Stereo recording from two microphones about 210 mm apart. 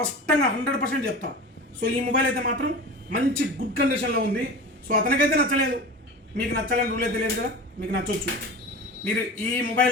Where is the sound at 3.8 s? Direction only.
55° right (ahead or behind).